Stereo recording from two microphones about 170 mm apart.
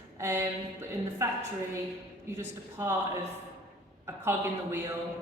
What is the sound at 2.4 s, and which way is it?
Speech, 15° right (ahead or behind).